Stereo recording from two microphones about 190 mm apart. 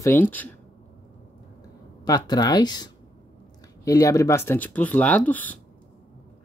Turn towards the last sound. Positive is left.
turn(degrees=10)  # may be behind; listen again after turning